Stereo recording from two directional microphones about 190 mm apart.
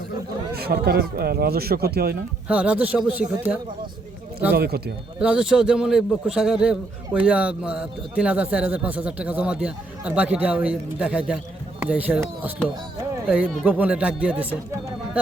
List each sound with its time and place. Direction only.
0.5 s speech: 55° right (ahead or behind)
2.5 s speech: 5° right (ahead or behind)
4.5 s speech: 55° right (ahead or behind)
5.2 s a man's voice: 5° right (ahead or behind)